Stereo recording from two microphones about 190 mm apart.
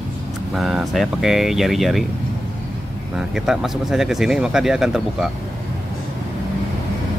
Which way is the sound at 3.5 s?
Centre (ahead or behind).